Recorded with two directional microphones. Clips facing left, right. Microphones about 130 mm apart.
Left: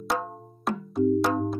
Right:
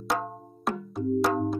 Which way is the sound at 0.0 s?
Centre (ahead or behind).